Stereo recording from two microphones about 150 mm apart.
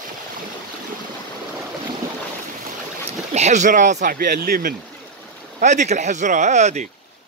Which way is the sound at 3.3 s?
50° right (ahead or behind).